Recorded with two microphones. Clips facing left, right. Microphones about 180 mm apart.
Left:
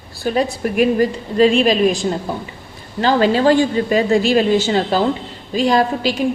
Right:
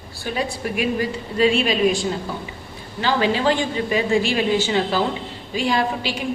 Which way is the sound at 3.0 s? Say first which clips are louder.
Left 6 dB; 45° left (ahead or behind).